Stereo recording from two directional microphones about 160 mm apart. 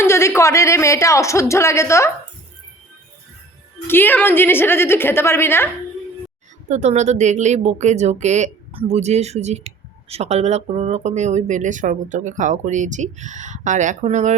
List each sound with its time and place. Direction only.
0.0 s speech: 15° left (ahead or behind)
3.8 s speech: 10° left (ahead or behind)
6.7 s a woman's voice: 45° right (ahead or behind)